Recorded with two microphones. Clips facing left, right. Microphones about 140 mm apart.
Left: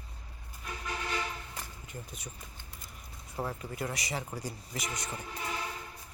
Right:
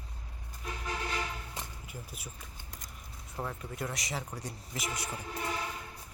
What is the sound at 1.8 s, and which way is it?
Speech, 5° right (ahead or behind).